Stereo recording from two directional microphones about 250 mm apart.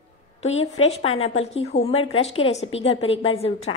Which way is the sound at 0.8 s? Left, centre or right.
Left.